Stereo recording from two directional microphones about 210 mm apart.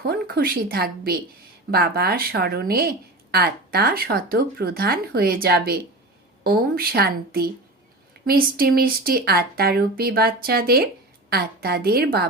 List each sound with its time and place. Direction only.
0.0 s speech: 50° right (ahead or behind)